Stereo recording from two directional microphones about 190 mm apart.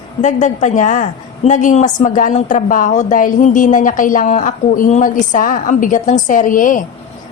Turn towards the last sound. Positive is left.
turn(degrees=45)  # may be behind; listen again after turning